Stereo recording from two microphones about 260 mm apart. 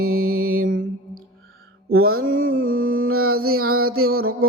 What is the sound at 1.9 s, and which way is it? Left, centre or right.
Mantra, right.